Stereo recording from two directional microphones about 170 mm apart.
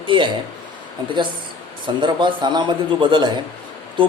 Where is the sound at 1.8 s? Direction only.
25° right (ahead or behind).